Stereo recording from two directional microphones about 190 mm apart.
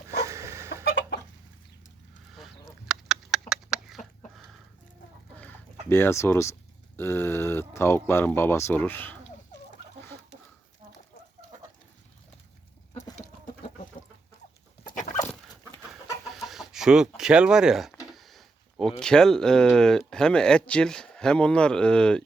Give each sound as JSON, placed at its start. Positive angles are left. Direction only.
{"t": 0.3, "sound": "chicken", "side_deg": -15}
{"t": 2.3, "sound": "duck", "side_deg": 0}
{"t": 5.4, "sound": "speech", "side_deg": 10}
{"t": 14.9, "sound": "chicken", "side_deg": 40}
{"t": 16.3, "sound": "speech", "side_deg": 0}